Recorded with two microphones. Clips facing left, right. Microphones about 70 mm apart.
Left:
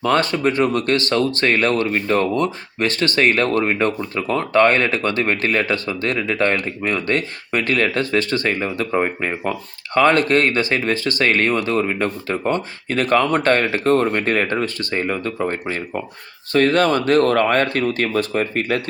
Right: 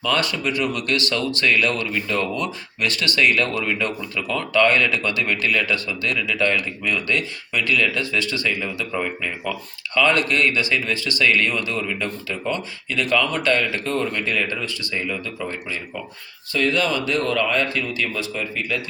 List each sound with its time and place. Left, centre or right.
0.0 s speech: left